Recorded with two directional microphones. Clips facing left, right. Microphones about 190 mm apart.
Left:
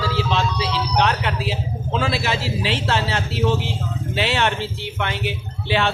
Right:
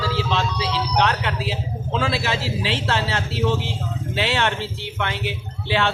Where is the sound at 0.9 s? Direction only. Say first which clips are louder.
Left 1 dB; 10° left (ahead or behind).